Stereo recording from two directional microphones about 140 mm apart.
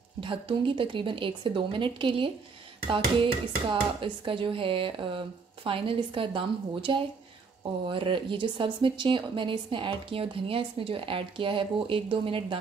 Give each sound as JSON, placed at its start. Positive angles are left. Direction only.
{"t": 0.2, "sound": "speech", "side_deg": -40}